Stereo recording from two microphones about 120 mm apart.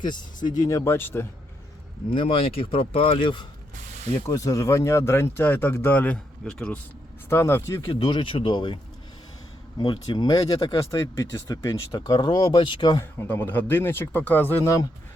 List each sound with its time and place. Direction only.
0.0 s speech: 40° left (ahead or behind); by 1.3 s 20° left (ahead or behind)
2.1 s speech: 50° left (ahead or behind)
4.3 s speech: 30° left (ahead or behind); by 6.7 s 10° left (ahead or behind)
7.3 s speech: 20° left (ahead or behind)
7.9 s speech: 40° left (ahead or behind)
13.1 s speech: 20° left (ahead or behind)